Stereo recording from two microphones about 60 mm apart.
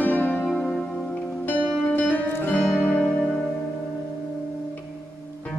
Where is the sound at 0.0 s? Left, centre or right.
Left.